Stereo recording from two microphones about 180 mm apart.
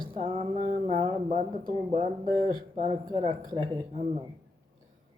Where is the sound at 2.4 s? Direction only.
50° right (ahead or behind).